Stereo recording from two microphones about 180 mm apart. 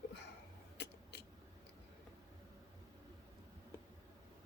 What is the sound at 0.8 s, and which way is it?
Biting, 70° left (ahead or behind).